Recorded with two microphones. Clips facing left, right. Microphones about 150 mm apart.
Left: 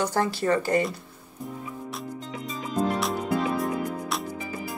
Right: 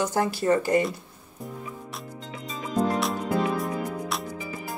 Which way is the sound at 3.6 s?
Centre (ahead or behind).